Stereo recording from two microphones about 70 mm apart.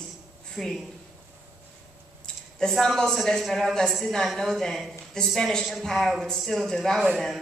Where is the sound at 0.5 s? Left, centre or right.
Centre.